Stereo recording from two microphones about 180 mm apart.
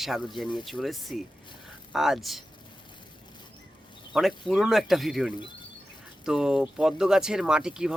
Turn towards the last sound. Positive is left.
turn(degrees=-5)  # may be behind; listen again after turning